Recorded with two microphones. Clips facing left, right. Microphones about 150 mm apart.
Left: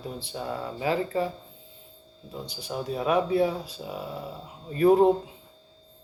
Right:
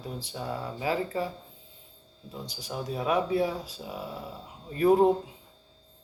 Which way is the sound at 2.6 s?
25° left (ahead or behind).